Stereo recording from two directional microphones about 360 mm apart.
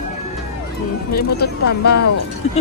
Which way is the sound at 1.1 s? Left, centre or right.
Left.